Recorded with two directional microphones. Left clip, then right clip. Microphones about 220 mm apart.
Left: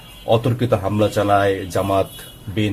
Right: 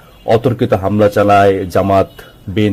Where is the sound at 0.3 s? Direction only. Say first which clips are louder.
Right 6 dB; 30° right (ahead or behind).